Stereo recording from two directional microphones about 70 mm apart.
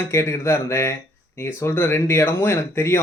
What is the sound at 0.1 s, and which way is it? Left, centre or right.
Speech, left.